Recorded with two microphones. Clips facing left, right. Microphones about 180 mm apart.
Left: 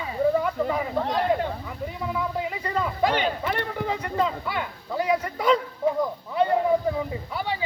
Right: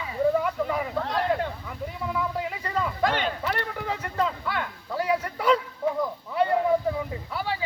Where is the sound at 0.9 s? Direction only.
20° left (ahead or behind).